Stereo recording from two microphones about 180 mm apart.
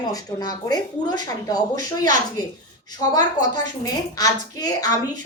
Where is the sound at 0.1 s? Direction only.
20° left (ahead or behind).